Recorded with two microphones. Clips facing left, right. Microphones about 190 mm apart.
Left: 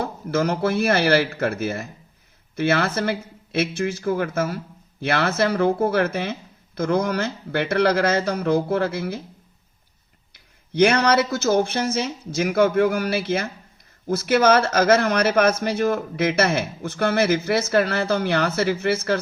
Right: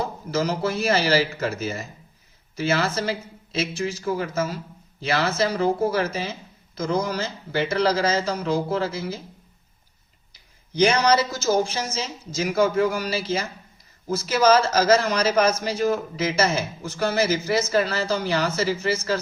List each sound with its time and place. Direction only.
0.0 s speech: 60° left (ahead or behind)
10.3 s speech: 60° left (ahead or behind)